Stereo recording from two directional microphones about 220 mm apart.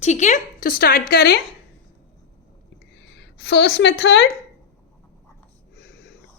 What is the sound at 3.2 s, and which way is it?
A woman's voice, 50° left (ahead or behind).